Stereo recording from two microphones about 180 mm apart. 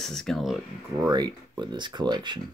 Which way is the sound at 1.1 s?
25° right (ahead or behind).